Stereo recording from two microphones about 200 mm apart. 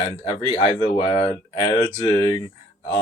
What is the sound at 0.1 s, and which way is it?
Speech, 30° left (ahead or behind).